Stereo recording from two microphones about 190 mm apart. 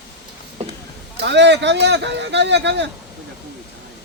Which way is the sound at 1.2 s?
65° right (ahead or behind).